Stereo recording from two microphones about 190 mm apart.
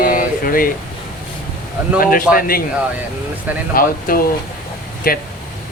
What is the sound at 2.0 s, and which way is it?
Speech, 50° left (ahead or behind).